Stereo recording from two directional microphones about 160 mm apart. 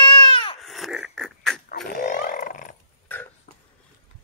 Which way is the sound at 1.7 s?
65° left (ahead or behind).